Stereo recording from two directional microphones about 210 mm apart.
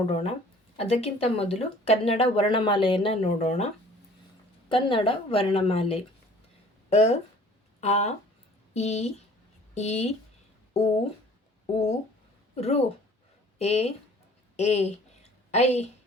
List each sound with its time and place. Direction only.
0.8 s speech: 30° left (ahead or behind)
4.7 s speech: 25° left (ahead or behind)
11.6 s speech: 30° left (ahead or behind)
14.5 s a sound: 35° left (ahead or behind)